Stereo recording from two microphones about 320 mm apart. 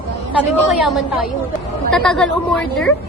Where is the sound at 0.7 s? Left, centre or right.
Centre.